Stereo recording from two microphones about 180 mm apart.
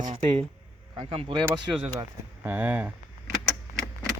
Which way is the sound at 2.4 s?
10° right (ahead or behind).